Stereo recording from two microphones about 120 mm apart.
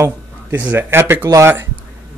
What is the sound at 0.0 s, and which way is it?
Speech, 15° right (ahead or behind).